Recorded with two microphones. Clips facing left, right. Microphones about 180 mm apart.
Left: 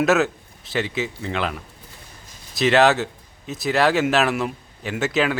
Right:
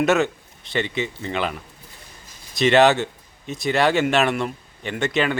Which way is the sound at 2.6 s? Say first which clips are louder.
Right 1 dB; centre (ahead or behind).